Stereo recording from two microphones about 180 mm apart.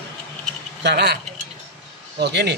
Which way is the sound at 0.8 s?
65° right (ahead or behind).